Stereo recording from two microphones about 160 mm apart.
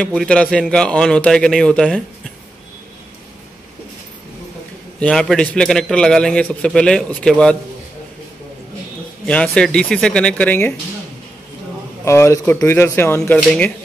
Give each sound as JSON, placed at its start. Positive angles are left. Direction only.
{"t": 0.0, "sound": "a man's voice", "side_deg": 5}
{"t": 5.0, "sound": "a man's voice", "side_deg": 5}
{"t": 9.2, "sound": "a man's voice", "side_deg": 5}
{"t": 12.0, "sound": "speech", "side_deg": 15}